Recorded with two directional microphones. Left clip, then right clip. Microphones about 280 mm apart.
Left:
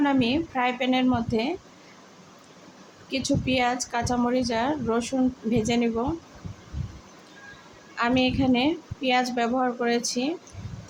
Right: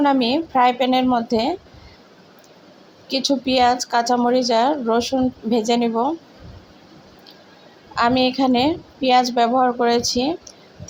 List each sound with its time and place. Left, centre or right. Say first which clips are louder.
0.0 s a woman's voice: right 6 dB; centre
3.1 s a woman's voice: right 6 dB; centre
7.9 s a woman's voice: right 6 dB; centre